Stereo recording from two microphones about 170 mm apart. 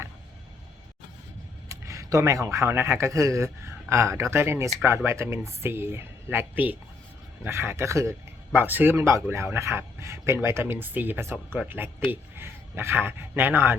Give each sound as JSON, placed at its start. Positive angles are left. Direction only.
{"t": 1.7, "sound": "speech", "side_deg": -20}